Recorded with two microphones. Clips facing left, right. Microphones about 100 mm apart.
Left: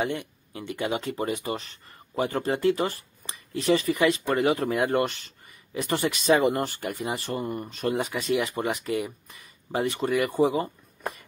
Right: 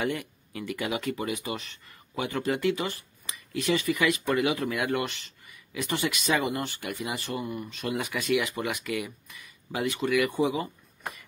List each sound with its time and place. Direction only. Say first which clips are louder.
0.0 s speech: left 1 dB; 25° left (ahead or behind); by 7.9 s 45° left (ahead or behind)
7.9 s speech: left 1 dB; 30° left (ahead or behind)